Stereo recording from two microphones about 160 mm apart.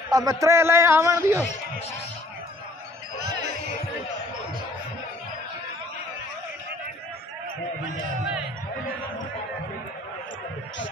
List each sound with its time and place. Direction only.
0.1 s a man's voice: 20° right (ahead or behind)